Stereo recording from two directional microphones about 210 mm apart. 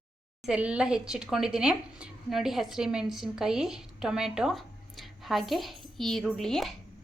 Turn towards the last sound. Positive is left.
turn(degrees=0)  # may be behind; listen again after turning